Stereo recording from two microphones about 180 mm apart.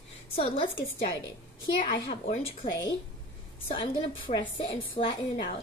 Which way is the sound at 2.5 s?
25° left (ahead or behind).